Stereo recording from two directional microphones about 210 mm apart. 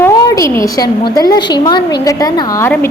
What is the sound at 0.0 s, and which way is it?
A woman's voice, 15° left (ahead or behind).